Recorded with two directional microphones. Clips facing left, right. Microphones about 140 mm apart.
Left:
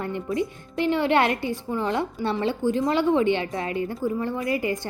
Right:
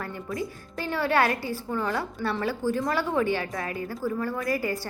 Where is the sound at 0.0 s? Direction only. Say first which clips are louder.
Left 6 dB; 20° left (ahead or behind).